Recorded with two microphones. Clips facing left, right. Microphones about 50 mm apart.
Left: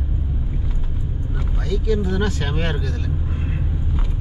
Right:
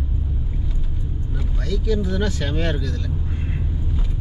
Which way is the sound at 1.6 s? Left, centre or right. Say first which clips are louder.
Left 1 dB; centre.